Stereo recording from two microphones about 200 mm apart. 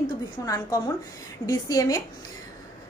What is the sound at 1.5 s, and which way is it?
Speech, 20° left (ahead or behind).